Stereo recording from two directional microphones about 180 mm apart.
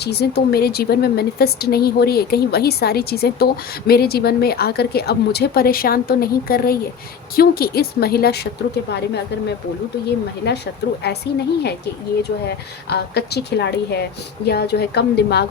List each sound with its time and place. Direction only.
0.0 s a woman's voice: 65° left (ahead or behind)
10.5 s a woman's voice: 65° left (ahead or behind)
10.8 s a woman's voice: 75° left (ahead or behind)
11.3 s a woman's voice: 65° left (ahead or behind)
12.9 s a woman's voice: 65° left (ahead or behind)